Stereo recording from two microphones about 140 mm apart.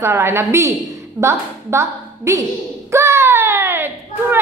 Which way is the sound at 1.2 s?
20° right (ahead or behind).